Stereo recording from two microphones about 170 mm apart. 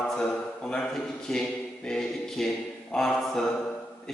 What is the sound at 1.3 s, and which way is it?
Speech, 5° left (ahead or behind).